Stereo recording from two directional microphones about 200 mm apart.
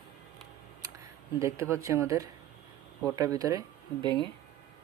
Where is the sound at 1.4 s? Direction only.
15° right (ahead or behind).